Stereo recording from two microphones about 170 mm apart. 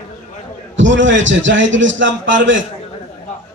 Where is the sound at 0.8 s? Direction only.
90° right.